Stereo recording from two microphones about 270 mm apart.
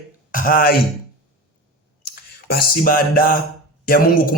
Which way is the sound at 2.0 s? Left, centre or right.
Left.